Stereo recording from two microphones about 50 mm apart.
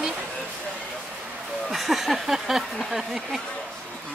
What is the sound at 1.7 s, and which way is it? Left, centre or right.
Speech, centre.